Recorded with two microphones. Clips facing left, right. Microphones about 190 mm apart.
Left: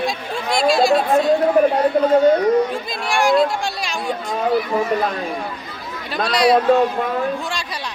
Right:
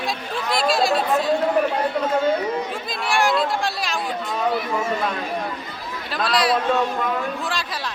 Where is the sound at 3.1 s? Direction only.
Centre (ahead or behind).